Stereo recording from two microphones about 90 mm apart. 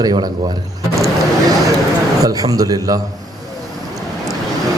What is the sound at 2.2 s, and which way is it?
Speech, 40° right (ahead or behind).